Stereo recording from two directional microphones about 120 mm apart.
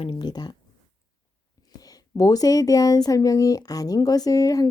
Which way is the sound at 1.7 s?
30° left (ahead or behind).